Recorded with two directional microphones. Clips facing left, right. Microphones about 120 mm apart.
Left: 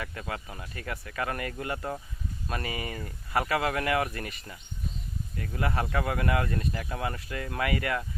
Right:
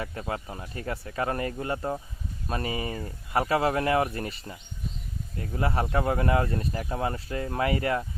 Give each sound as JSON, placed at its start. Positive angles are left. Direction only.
{"t": 0.0, "sound": "speech", "side_deg": -30}